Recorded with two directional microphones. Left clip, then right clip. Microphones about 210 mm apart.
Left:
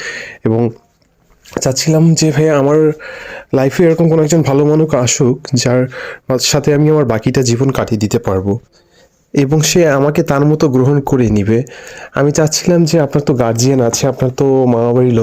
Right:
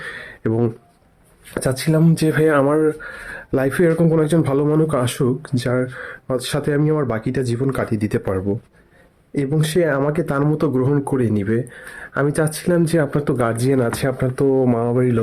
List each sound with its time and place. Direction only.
0.0 s a sound: 35° left (ahead or behind)
1.5 s speech: 30° left (ahead or behind)
9.3 s speech: 40° left (ahead or behind)